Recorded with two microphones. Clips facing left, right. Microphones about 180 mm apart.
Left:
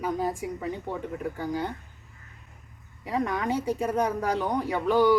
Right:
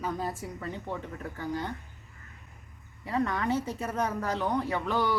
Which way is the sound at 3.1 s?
15° left (ahead or behind).